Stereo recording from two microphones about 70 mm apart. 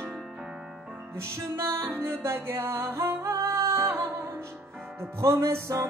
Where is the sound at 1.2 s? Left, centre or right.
Right.